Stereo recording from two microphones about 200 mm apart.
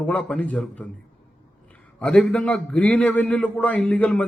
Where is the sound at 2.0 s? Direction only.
5° left (ahead or behind).